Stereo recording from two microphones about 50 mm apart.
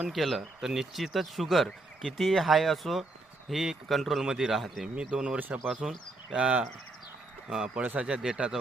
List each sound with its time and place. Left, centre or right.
0.1 s speech: centre
4.2 s speech: centre
4.9 s speech: centre
5.8 s speech: centre
6.3 s speech: right
7.8 s speech: right
8.0 s speech: centre